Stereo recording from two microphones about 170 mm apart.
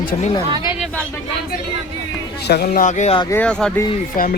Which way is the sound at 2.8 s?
45° left (ahead or behind).